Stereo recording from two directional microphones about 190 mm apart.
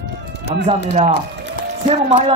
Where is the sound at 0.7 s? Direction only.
35° right (ahead or behind).